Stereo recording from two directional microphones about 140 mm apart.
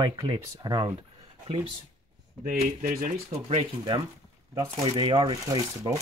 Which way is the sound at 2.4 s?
85° right.